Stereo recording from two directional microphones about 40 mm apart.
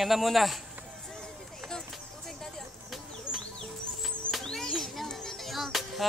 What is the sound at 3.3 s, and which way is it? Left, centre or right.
Music, left.